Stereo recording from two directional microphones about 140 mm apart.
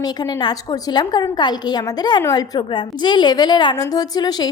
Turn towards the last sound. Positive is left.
turn(degrees=30)  # may be behind; listen again after turning